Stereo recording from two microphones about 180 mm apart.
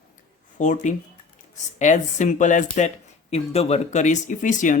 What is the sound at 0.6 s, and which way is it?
Speech, 45° left (ahead or behind).